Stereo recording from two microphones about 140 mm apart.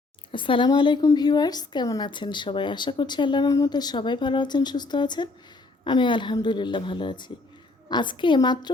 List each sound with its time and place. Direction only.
0.3 s a woman's voice: 35° left (ahead or behind)